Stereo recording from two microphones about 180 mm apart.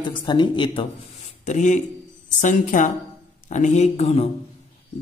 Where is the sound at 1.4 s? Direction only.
40° left (ahead or behind).